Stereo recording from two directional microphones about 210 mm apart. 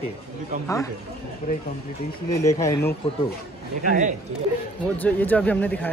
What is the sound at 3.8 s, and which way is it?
Speech, 35° right (ahead or behind).